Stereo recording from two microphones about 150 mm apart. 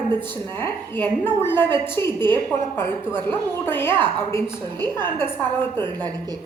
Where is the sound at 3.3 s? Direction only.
15° left (ahead or behind).